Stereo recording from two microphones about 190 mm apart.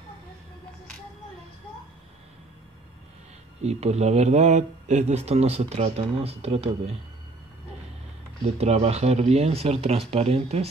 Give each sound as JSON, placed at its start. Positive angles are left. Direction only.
{"t": 3.6, "sound": "speech", "side_deg": -35}
{"t": 8.5, "sound": "speech", "side_deg": -35}